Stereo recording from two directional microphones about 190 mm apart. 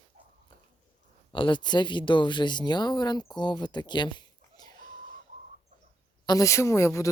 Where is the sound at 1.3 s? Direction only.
25° left (ahead or behind).